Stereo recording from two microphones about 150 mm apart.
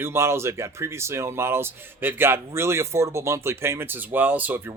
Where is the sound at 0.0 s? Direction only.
15° right (ahead or behind).